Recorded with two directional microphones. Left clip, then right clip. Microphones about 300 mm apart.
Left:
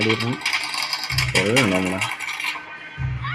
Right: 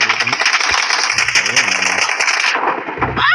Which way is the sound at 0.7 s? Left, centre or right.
Right.